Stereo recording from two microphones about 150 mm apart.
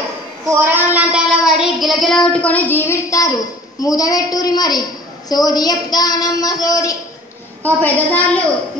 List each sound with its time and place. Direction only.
0.7 s child singing: 10° right (ahead or behind); by 4.8 s 25° left (ahead or behind)
5.3 s a woman's voice: 25° left (ahead or behind)
7.6 s a woman's voice: 10° left (ahead or behind)